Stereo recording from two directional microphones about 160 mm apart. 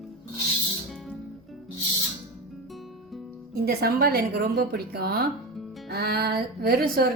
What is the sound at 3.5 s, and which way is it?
A woman's voice, 80° right.